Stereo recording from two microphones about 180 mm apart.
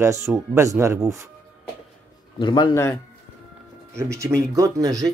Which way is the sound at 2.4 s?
25° left (ahead or behind).